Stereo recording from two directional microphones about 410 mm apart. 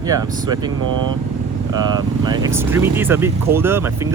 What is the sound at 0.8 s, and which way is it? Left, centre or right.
Speech, right.